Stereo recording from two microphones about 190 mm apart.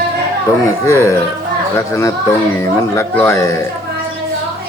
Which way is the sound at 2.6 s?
15° left (ahead or behind).